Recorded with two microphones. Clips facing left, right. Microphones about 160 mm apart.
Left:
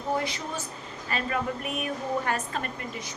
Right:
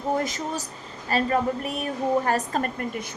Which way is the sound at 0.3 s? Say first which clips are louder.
Right 4 dB; 40° right (ahead or behind).